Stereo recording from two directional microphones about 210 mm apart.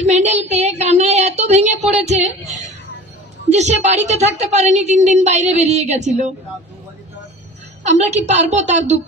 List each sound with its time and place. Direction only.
0.0 s speech: 30° right (ahead or behind)
3.5 s a woman's voice: 35° right (ahead or behind)
7.8 s a woman's voice: 35° right (ahead or behind)